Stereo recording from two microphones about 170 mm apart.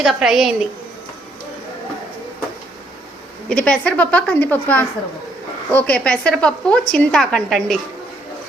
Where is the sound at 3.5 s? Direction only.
5° left (ahead or behind).